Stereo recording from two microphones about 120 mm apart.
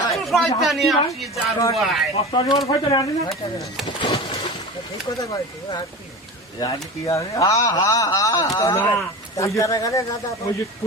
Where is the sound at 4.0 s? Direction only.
40° left (ahead or behind).